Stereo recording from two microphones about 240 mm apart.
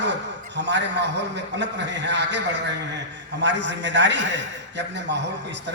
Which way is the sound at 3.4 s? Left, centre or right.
Right.